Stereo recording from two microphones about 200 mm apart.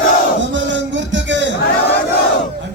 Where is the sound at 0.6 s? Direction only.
65° right (ahead or behind).